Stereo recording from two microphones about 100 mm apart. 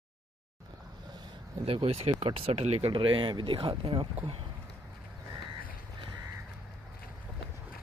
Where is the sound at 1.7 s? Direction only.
75° right (ahead or behind).